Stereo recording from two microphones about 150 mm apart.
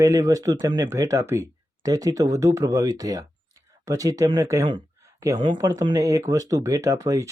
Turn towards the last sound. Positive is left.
turn(degrees=-20)  # may be behind; listen again after turning